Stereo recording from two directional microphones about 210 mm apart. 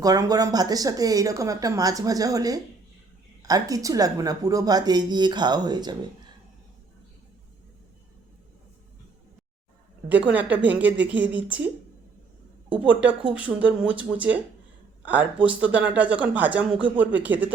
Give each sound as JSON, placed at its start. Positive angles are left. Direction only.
{"t": 0.0, "sound": "speech", "side_deg": -15}
{"t": 10.3, "sound": "speech", "side_deg": -5}
{"t": 12.8, "sound": "speech", "side_deg": -5}